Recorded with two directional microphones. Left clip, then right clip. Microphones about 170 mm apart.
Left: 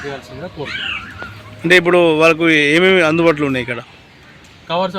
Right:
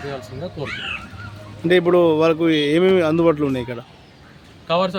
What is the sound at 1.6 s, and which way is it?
Speech, 5° right (ahead or behind).